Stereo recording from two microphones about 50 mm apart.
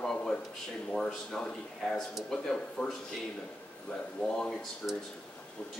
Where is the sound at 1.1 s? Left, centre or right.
Centre.